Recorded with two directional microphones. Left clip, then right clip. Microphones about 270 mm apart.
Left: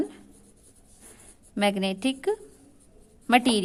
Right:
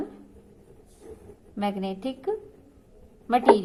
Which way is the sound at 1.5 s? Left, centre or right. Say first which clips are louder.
Left 4 dB; left.